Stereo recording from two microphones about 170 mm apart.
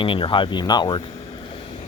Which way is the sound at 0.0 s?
30° left (ahead or behind).